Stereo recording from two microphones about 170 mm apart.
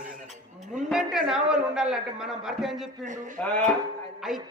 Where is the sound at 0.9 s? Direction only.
5° right (ahead or behind).